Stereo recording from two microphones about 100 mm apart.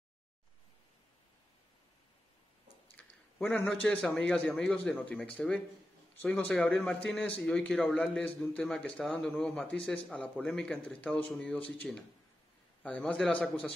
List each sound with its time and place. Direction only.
3.4 s a man's voice: 15° left (ahead or behind)